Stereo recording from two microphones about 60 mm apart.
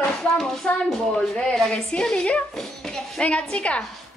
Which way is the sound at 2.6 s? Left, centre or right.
Centre.